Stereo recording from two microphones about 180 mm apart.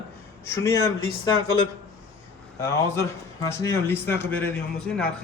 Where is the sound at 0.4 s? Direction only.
15° left (ahead or behind).